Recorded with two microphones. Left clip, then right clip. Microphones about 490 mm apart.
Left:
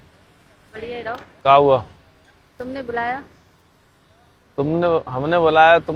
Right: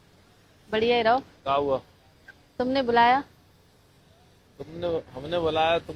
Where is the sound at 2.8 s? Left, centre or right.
Right.